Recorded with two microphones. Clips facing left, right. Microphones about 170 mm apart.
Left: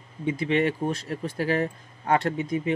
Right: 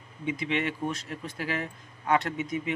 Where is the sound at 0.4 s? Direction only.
40° left (ahead or behind).